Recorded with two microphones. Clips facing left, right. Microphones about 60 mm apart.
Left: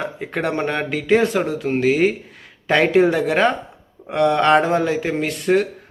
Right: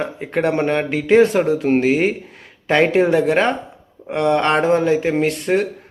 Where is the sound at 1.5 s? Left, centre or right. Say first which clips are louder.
Right 5 dB; right.